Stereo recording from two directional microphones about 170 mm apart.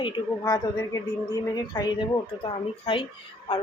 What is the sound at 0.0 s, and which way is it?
Speech, 20° left (ahead or behind).